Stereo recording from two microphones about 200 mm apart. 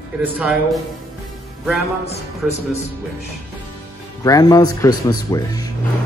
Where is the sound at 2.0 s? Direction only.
30° left (ahead or behind).